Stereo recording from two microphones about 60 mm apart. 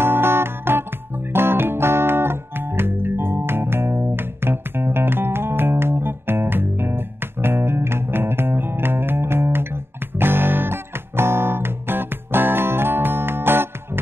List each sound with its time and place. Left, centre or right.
0.0 s music: right